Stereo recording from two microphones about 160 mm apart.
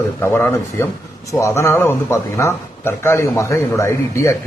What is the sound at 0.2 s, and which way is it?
A man's voice, 15° left (ahead or behind).